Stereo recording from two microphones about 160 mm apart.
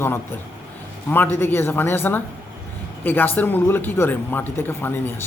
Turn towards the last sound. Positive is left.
turn(degrees=15)  # may be behind; listen again after turning